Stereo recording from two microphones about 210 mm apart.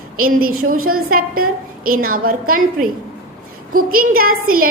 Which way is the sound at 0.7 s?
90° right.